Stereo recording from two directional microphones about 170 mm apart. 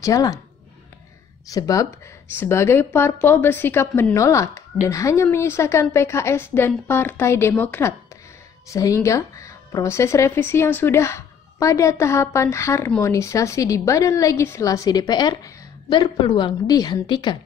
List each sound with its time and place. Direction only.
0.0 s a woman's voice: 20° left (ahead or behind)
1.5 s a woman's voice: 20° left (ahead or behind)